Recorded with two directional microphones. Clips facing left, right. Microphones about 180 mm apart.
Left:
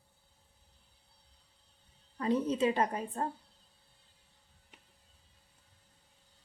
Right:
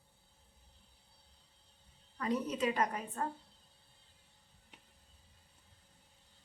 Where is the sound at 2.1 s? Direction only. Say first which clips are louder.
Left 5 dB; 30° left (ahead or behind).